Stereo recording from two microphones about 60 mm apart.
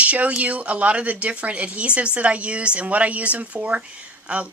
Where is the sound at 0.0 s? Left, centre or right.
Right.